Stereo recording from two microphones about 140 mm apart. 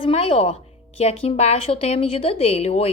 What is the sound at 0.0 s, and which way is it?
A woman's voice, 40° left (ahead or behind).